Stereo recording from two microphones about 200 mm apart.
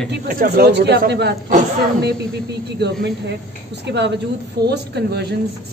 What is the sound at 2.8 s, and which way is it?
A woman's voice, 60° right (ahead or behind).